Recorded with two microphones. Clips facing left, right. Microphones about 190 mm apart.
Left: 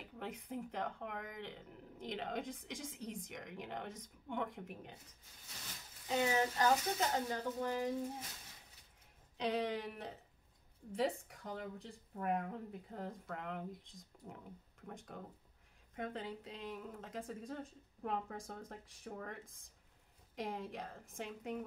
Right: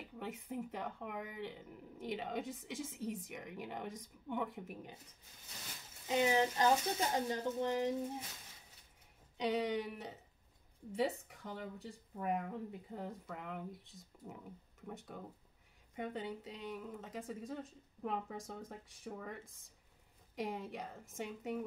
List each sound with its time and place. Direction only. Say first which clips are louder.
0.2 s speech: right 1 dB; 5° right (ahead or behind)
6.0 s speech: right 2 dB; 20° right (ahead or behind)
9.4 s speech: right 2 dB; centre (ahead or behind)
20.3 s speech: right 1 dB; centre (ahead or behind)